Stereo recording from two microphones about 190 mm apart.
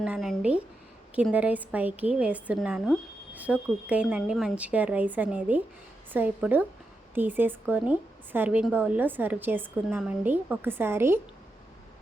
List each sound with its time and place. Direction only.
0.0 s a woman's voice: centre (ahead or behind)